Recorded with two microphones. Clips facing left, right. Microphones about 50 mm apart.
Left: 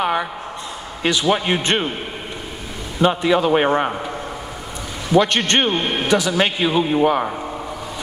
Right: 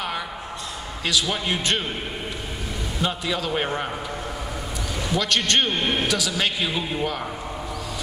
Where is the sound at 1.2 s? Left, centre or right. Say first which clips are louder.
Left 7 dB; left.